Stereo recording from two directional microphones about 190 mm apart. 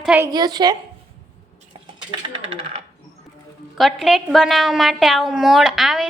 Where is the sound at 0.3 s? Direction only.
20° right (ahead or behind).